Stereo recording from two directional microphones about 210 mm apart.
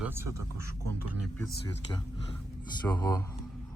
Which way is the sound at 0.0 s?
10° right (ahead or behind).